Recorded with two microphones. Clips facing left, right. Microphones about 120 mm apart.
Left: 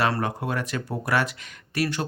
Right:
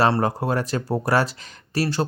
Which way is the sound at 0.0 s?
35° right (ahead or behind).